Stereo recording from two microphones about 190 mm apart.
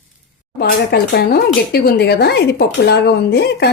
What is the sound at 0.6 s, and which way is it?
Speech, 55° left (ahead or behind).